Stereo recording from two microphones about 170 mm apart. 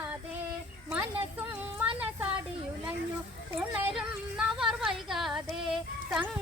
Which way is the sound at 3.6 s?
5° right (ahead or behind).